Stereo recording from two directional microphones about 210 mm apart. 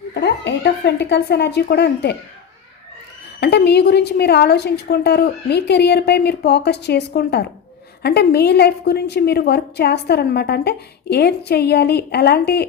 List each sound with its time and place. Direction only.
0.1 s a woman's voice: 55° left (ahead or behind)
3.4 s a woman's voice: 50° left (ahead or behind)